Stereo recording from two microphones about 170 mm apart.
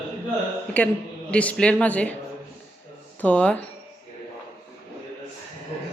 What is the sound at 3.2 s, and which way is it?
Speech, 10° left (ahead or behind).